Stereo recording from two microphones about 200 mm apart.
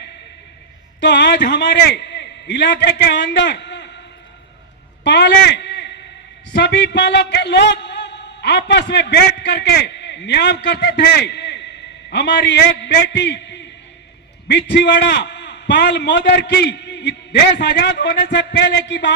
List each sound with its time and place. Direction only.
1.0 s a man's voice: 60° left (ahead or behind)
5.0 s a sound: 60° left (ahead or behind)
6.5 s a man's voice: 60° left (ahead or behind)